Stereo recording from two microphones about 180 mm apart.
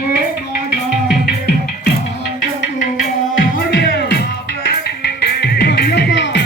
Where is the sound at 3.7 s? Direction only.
65° left (ahead or behind).